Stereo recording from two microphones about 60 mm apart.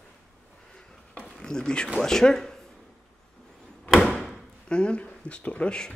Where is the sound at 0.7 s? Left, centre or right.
Centre.